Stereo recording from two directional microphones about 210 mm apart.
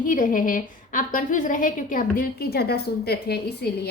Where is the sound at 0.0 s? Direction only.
40° left (ahead or behind).